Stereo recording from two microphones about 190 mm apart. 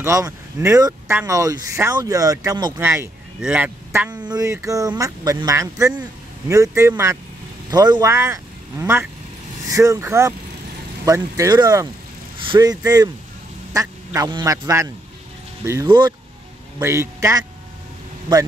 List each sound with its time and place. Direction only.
0.0 s speech: 15° right (ahead or behind)